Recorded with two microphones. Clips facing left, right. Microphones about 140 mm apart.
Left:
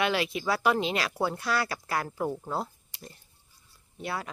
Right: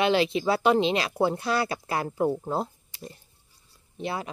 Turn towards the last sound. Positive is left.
turn(degrees=-25)  # may be behind; listen again after turning